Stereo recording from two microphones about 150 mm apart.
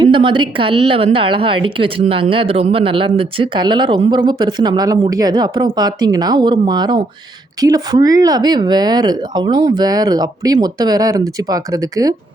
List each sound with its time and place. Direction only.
0.0 s a woman's voice: 35° right (ahead or behind)